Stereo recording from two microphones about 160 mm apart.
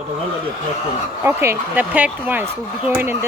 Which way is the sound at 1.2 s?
15° right (ahead or behind).